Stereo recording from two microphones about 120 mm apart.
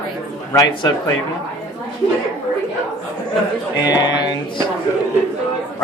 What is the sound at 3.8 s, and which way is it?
Speech, 35° left (ahead or behind).